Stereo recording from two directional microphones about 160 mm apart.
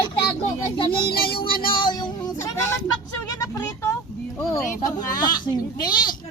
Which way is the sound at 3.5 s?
15° left (ahead or behind).